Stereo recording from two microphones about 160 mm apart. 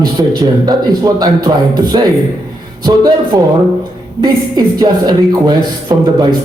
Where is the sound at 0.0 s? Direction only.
25° right (ahead or behind).